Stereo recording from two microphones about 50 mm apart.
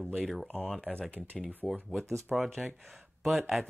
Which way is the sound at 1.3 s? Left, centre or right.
Centre.